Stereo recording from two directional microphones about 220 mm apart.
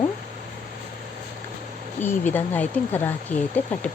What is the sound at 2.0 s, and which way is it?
Speech, 10° left (ahead or behind).